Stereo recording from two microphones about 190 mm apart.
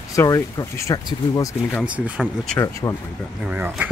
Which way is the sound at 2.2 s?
5° left (ahead or behind).